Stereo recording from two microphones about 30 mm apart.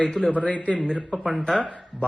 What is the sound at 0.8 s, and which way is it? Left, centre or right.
Speech, left.